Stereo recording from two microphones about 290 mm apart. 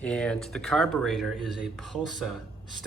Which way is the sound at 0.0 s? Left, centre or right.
Centre.